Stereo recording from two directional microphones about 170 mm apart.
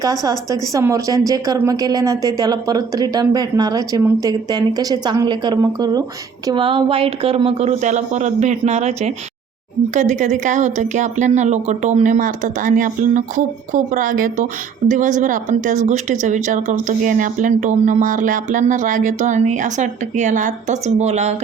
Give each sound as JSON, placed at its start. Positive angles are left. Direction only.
{"t": 0.0, "sound": "speech", "side_deg": -20}